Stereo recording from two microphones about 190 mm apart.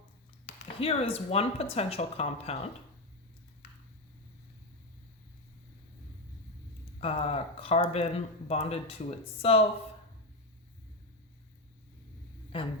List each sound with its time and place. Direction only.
0.8 s speech: 30° left (ahead or behind)
7.0 s speech: 30° left (ahead or behind)
12.5 s a woman's voice: 30° left (ahead or behind)